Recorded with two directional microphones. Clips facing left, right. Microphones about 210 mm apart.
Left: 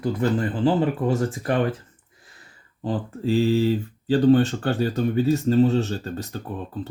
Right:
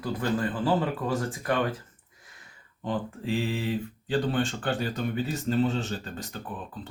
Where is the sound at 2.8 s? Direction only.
35° left (ahead or behind).